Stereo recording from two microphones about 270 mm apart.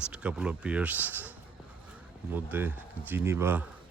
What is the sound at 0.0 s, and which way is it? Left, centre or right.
Speech, centre.